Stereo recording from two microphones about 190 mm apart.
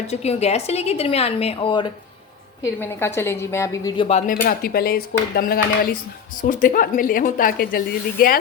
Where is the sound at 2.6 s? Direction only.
10° left (ahead or behind).